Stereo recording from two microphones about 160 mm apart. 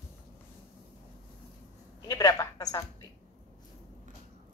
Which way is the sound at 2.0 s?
25° left (ahead or behind).